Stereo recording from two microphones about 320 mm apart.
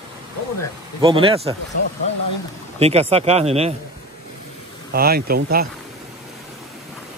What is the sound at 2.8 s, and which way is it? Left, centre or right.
Speech, centre.